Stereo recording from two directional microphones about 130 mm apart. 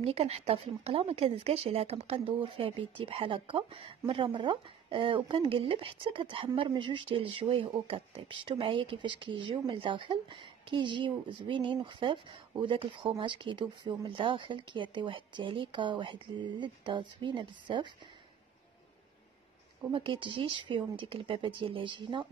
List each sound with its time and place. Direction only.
0.0 s speech: 50° right (ahead or behind)
19.9 s speech: 40° right (ahead or behind)